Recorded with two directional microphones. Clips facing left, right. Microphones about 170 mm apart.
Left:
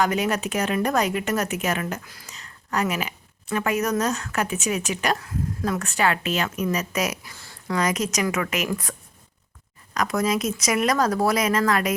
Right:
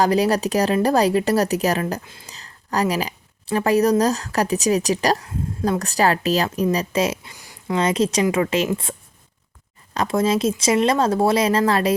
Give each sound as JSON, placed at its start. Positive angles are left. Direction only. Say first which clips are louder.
{"t": 0.0, "sound": "a woman's voice", "louder": "right 5 dB", "side_deg": -35}
{"t": 7.8, "sound": "speech", "louder": "right 5 dB", "side_deg": -30}